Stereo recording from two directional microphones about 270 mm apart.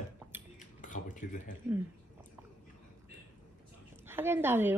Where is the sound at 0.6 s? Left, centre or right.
Left.